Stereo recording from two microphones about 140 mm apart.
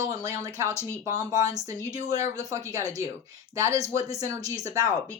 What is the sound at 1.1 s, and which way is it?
Speech, 25° right (ahead or behind).